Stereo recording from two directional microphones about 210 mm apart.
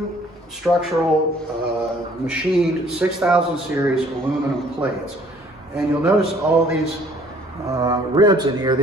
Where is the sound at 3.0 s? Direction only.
10° right (ahead or behind).